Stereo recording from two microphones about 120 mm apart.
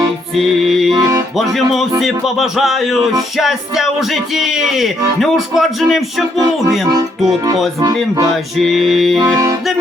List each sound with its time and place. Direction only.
0.3 s speech: centre (ahead or behind)
8.5 s speech: centre (ahead or behind)
9.3 s music: 30° right (ahead or behind)